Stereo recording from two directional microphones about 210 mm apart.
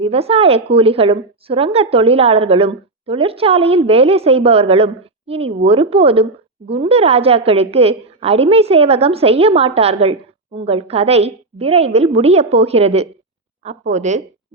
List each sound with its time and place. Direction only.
0.0 s a woman's voice: 30° right (ahead or behind)